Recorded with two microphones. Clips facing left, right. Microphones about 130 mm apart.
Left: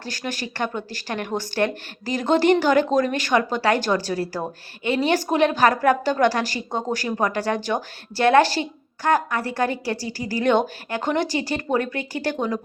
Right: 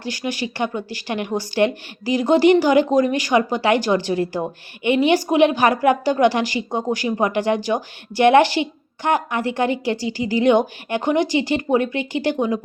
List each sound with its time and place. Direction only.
0.0 s speech: 15° right (ahead or behind)